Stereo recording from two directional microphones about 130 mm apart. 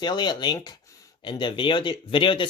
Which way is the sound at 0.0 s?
35° left (ahead or behind).